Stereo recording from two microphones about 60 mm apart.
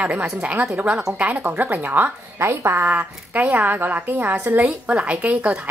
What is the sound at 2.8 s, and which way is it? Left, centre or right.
A woman's voice, right.